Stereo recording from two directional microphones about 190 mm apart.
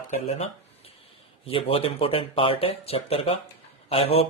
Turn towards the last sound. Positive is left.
turn(degrees=30)  # may be behind; listen again after turning